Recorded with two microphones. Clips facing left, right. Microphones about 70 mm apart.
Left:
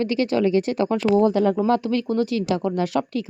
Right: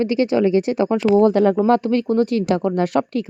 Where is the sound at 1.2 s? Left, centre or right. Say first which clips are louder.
Right 4 dB; right.